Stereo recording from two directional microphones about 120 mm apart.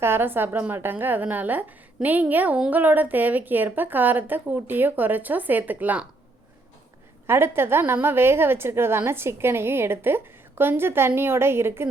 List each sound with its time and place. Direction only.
0.0 s a woman's voice: 20° right (ahead or behind)
7.3 s a woman's voice: 20° right (ahead or behind)